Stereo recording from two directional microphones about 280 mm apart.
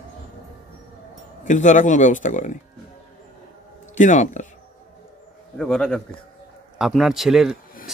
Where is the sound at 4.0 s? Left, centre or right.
Left.